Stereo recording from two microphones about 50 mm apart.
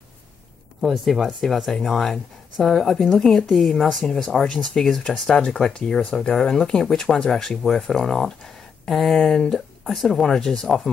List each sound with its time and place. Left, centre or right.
0.8 s speech: centre